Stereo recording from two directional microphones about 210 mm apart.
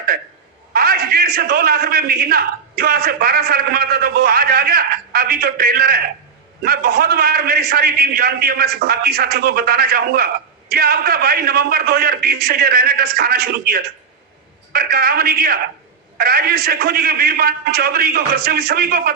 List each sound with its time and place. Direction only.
0.7 s a man's voice: 45° right (ahead or behind)